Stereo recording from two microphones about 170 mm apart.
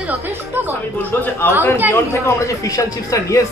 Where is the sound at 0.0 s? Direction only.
10° right (ahead or behind).